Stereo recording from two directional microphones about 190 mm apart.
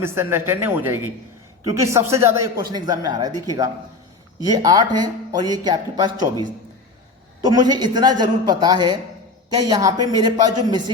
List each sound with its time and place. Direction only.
0.0 s speech: 15° right (ahead or behind)
7.4 s speech: 20° right (ahead or behind)